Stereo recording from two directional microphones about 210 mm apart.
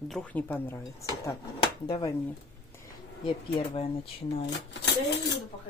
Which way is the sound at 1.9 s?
20° left (ahead or behind).